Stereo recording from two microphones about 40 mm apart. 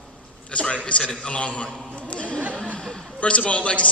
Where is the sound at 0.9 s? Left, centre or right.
Left.